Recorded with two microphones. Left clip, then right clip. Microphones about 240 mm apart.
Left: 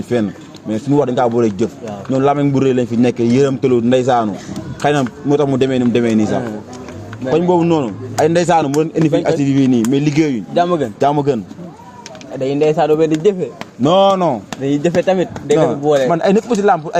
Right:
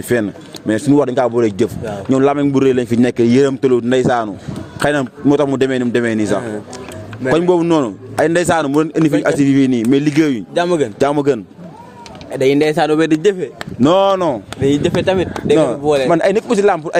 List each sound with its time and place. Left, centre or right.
0.1 s a man's voice: right
10.5 s speech: right
11.0 s a man's voice: right
12.4 s a man's voice: right
14.6 s speech: centre
16.1 s a man's voice: right